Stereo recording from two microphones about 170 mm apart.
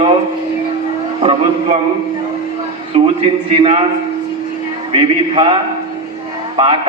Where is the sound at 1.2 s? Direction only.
35° right (ahead or behind).